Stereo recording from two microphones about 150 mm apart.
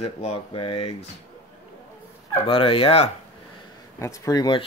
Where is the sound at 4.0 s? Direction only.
20° left (ahead or behind).